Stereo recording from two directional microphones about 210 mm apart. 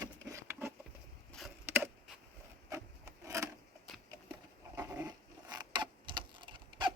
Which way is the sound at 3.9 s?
Centre (ahead or behind).